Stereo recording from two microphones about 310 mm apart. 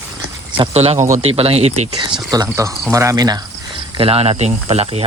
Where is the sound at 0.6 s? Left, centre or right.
Centre.